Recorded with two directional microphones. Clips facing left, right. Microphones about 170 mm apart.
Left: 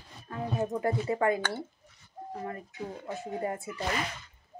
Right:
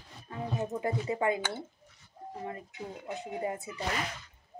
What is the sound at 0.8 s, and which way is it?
Speech, 20° right (ahead or behind).